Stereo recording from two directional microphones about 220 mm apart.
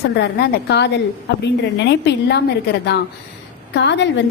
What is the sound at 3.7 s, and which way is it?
Speech, 55° left (ahead or behind).